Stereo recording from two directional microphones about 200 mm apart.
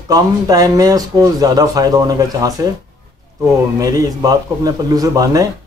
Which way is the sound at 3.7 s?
15° right (ahead or behind).